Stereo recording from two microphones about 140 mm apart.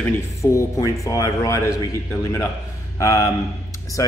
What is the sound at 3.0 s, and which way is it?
Speech, 20° left (ahead or behind).